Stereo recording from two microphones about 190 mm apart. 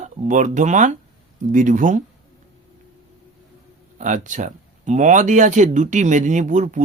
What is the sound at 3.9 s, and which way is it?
Speech, 40° right (ahead or behind).